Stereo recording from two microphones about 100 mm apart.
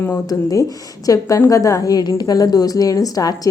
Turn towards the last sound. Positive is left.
turn(degrees=35)  # may be behind; listen again after turning